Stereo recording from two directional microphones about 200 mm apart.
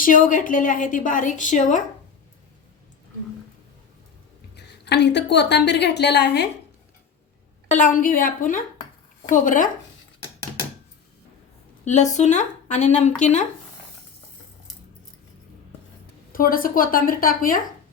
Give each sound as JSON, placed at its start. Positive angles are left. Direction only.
{"t": 0.0, "sound": "a woman's voice", "side_deg": 40}
{"t": 4.5, "sound": "a woman's voice", "side_deg": 55}
{"t": 7.7, "sound": "a woman's voice", "side_deg": 40}
{"t": 11.9, "sound": "a woman's voice", "side_deg": 35}
{"t": 16.3, "sound": "a woman's voice", "side_deg": 45}